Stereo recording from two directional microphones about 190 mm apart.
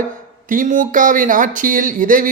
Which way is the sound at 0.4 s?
45° right (ahead or behind).